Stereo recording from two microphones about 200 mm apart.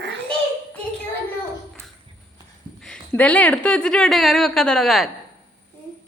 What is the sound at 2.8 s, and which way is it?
A woman's voice, 5° left (ahead or behind).